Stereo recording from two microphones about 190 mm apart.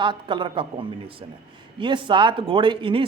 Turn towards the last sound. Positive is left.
turn(degrees=-30)  # may be behind; listen again after turning